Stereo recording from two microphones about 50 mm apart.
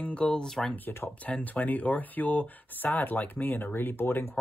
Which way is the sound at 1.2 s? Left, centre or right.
Left.